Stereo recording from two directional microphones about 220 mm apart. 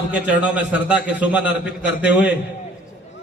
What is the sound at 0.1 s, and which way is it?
A man's voice, 5° right (ahead or behind).